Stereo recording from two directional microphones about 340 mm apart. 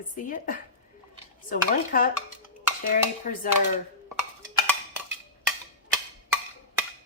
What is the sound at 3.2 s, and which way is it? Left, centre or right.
Speech, left.